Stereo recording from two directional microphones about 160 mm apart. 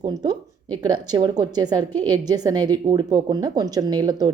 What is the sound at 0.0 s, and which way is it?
A woman's voice, 25° right (ahead or behind).